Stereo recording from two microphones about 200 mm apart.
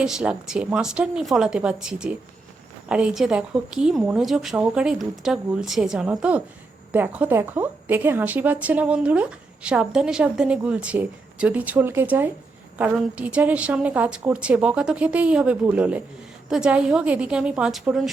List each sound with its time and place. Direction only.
0.0 s a woman's voice: 5° right (ahead or behind)